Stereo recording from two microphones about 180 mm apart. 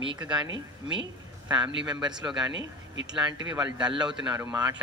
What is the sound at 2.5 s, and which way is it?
Speech, 90° right.